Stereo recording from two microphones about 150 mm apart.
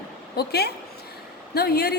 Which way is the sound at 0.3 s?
90° left.